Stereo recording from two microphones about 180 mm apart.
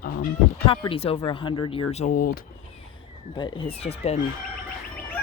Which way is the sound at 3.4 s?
30° left (ahead or behind).